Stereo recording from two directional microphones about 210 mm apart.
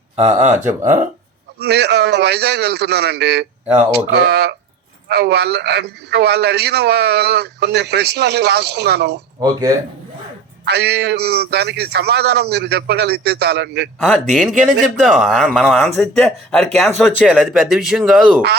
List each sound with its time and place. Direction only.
0.3 s speech: 35° right (ahead or behind)
1.5 s a man's voice: 50° right (ahead or behind)
9.4 s speech: 15° right (ahead or behind)
10.7 s a man's voice: 50° right (ahead or behind)
14.0 s a man's voice: centre (ahead or behind)
17.2 s a man's voice: centre (ahead or behind)